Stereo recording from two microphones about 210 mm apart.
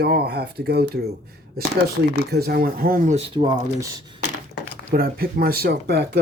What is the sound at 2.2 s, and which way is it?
Speech, 50° right (ahead or behind).